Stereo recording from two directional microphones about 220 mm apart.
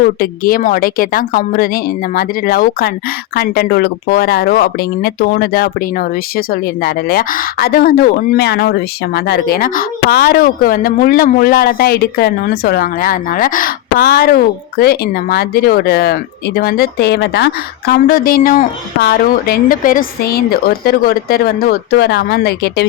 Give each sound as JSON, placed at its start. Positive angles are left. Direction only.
{"t": 0.0, "sound": "a woman's voice", "side_deg": 40}